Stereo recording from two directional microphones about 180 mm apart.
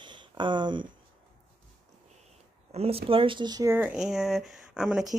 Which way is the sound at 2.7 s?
35° right (ahead or behind).